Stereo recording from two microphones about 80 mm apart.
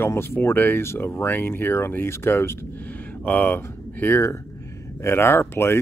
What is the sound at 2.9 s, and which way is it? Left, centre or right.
Speech, centre.